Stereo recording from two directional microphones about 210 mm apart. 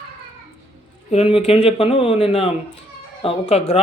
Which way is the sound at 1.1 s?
25° left (ahead or behind).